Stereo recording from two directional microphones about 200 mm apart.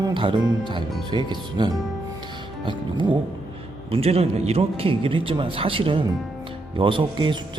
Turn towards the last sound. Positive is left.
turn(degrees=-25)  # may be behind; listen again after turning